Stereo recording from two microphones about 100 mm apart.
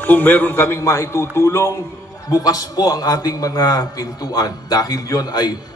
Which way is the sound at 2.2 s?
40° left (ahead or behind).